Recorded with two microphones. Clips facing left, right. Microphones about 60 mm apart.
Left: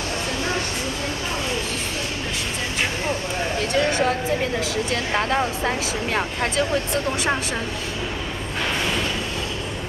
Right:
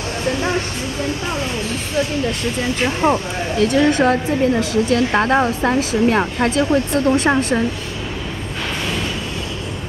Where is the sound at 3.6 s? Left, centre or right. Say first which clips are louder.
Right 7 dB; right.